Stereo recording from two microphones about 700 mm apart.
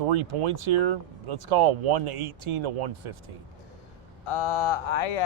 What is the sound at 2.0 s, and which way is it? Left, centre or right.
Speech, right.